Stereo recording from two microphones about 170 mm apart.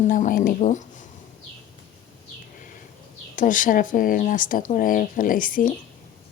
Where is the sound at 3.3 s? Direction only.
50° left (ahead or behind).